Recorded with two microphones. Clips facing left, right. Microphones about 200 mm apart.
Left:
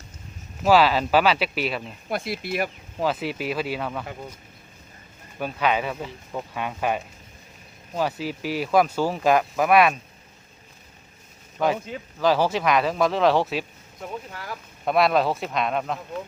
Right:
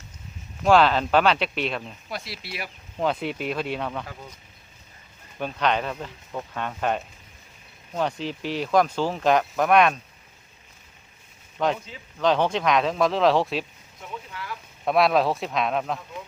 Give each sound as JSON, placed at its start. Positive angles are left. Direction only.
{"t": 0.6, "sound": "speech", "side_deg": 5}
{"t": 2.0, "sound": "speech", "side_deg": 50}
{"t": 3.0, "sound": "speech", "side_deg": 5}
{"t": 5.4, "sound": "speech", "side_deg": 5}
{"t": 11.6, "sound": "speech", "side_deg": 5}
{"t": 14.0, "sound": "speech", "side_deg": 40}
{"t": 14.8, "sound": "speech", "side_deg": 0}